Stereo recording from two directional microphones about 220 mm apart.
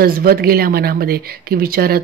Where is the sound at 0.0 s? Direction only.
40° right (ahead or behind).